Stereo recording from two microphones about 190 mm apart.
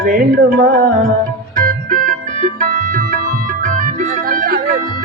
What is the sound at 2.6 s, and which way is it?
Music, 45° right (ahead or behind).